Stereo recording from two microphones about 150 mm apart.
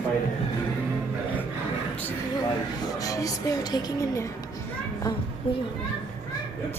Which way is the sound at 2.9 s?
25° left (ahead or behind).